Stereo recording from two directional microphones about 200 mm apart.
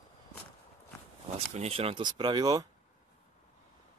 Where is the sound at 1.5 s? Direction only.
30° right (ahead or behind).